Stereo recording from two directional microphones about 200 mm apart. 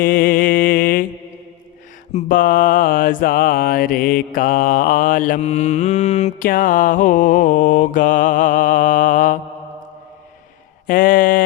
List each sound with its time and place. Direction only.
0.0 s mantra: 45° left (ahead or behind)
2.1 s mantra: 45° left (ahead or behind)
10.8 s a sound: 45° left (ahead or behind)